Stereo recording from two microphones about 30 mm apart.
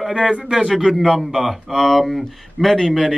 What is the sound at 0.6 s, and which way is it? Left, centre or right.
Speech, centre.